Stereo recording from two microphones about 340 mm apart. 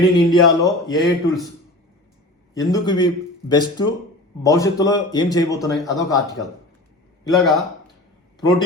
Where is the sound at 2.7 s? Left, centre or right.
Centre.